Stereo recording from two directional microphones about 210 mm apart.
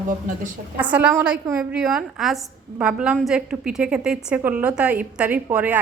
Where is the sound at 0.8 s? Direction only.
5° right (ahead or behind).